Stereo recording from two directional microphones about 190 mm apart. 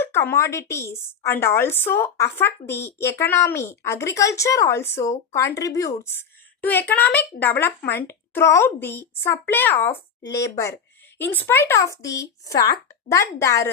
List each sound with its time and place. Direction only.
0.0 s a woman's voice: 10° left (ahead or behind)